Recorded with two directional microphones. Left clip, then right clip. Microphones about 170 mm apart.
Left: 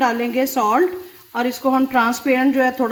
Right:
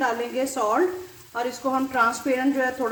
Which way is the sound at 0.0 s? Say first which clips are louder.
Left 6 dB; 50° left (ahead or behind).